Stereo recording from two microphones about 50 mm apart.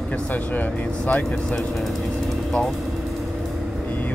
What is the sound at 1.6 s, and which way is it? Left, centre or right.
Speech, centre.